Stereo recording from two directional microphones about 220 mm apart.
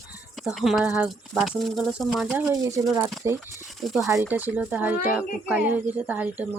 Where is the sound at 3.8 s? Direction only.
Centre (ahead or behind).